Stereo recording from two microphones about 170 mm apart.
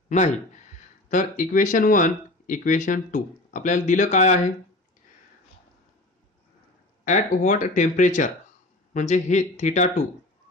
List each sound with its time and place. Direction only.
1.1 s speech: 50° left (ahead or behind)
7.0 s speech: 50° left (ahead or behind)